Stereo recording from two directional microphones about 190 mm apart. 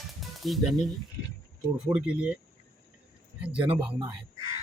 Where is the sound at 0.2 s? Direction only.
Centre (ahead or behind).